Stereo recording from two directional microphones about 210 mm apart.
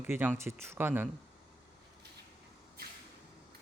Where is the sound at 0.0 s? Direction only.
10° right (ahead or behind).